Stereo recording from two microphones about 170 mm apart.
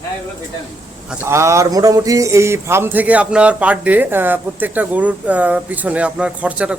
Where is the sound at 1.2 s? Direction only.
15° right (ahead or behind).